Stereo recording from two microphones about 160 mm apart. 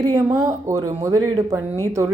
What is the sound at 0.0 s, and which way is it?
Speech, 25° right (ahead or behind).